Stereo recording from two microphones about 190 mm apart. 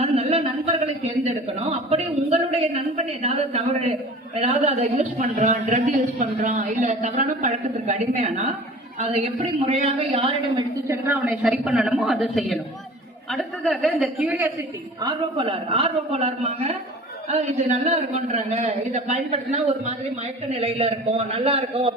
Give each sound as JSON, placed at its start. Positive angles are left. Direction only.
{"t": 0.0, "sound": "a sound", "side_deg": -35}
{"t": 1.5, "sound": "a man's voice", "side_deg": -30}
{"t": 10.8, "sound": "a woman's voice", "side_deg": -10}
{"t": 15.0, "sound": "a man's voice", "side_deg": -25}